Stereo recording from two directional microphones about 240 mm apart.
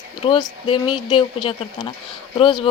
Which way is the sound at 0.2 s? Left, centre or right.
Centre.